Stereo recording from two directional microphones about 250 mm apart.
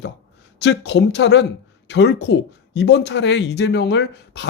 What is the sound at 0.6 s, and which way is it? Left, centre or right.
Speech, left.